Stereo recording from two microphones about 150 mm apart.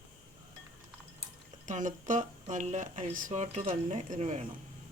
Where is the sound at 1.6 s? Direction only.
55° right (ahead or behind).